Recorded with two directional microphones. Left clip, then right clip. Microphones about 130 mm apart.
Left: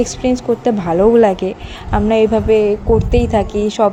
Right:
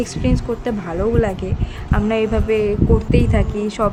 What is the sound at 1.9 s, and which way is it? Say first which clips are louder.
Speech: left 6 dB; 25° left (ahead or behind).